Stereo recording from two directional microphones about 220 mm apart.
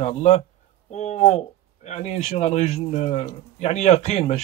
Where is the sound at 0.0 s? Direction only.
30° left (ahead or behind).